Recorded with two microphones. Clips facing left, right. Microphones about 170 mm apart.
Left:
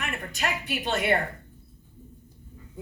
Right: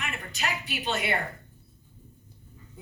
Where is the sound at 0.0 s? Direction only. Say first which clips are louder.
Left 3 dB; 50° left (ahead or behind).